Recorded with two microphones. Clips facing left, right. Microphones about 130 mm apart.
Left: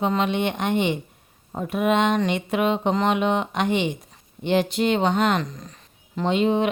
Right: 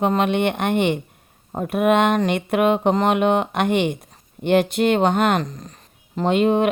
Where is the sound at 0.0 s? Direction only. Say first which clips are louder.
Right 4 dB; 55° right (ahead or behind).